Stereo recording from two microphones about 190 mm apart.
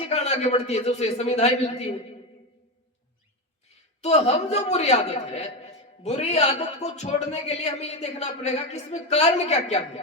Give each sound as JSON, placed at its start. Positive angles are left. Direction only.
{"t": 0.0, "sound": "a man's voice", "side_deg": 35}
{"t": 4.0, "sound": "a man's voice", "side_deg": 35}